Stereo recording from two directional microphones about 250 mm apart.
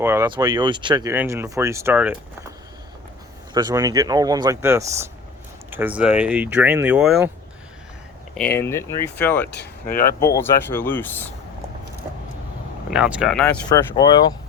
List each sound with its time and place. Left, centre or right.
0.0 s speech: centre
3.5 s speech: centre
8.5 s speech: centre
9.5 s speech: left
10.2 s speech: centre
12.9 s speech: centre
13.7 s speech: centre